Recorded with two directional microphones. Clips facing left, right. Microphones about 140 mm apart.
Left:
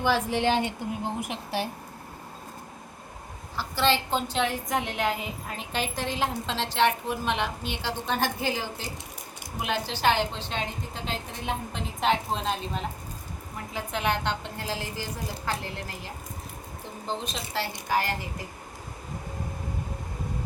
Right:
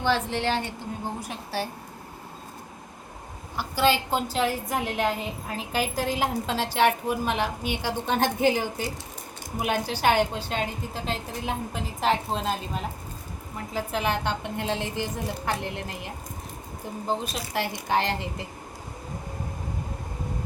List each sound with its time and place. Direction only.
0.0 s a woman's voice: 10° left (ahead or behind)
3.6 s a woman's voice: 10° right (ahead or behind)
9.8 s a woman's voice: 10° right (ahead or behind)
14.4 s a woman's voice: 20° right (ahead or behind)